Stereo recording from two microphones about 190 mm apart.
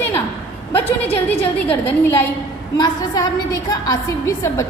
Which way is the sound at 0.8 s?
10° left (ahead or behind).